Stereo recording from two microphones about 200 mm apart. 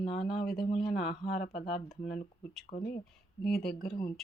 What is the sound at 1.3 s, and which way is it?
Speech, 30° left (ahead or behind).